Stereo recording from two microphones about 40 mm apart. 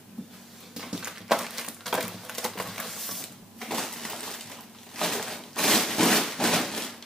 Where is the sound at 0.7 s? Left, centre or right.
Centre.